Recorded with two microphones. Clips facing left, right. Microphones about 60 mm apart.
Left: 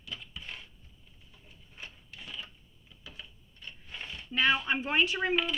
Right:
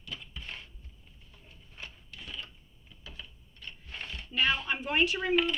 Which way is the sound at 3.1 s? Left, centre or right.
Centre.